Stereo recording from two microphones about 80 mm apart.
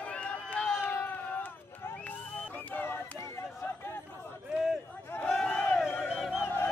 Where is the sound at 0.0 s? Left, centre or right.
Centre.